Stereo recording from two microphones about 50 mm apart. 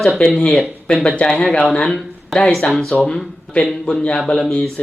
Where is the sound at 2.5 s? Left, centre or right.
Centre.